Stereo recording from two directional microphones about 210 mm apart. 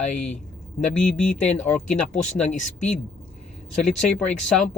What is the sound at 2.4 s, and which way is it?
Speech, 35° left (ahead or behind).